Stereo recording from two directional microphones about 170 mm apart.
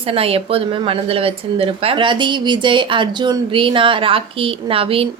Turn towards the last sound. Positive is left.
turn(degrees=-35)  # may be behind; listen again after turning